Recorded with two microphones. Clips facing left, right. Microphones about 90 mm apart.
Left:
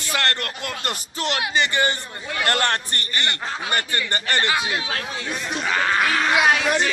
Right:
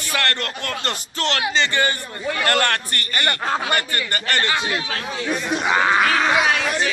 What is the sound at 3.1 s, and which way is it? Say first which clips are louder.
Speech: right 6 dB; 50° right (ahead or behind).